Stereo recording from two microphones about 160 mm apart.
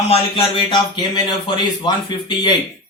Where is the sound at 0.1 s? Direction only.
30° left (ahead or behind).